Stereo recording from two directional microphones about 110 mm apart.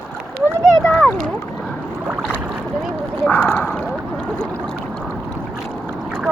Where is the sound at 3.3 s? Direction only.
15° left (ahead or behind).